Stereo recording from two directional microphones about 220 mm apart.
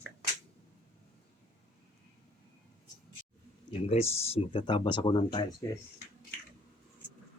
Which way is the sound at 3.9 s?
30° left (ahead or behind).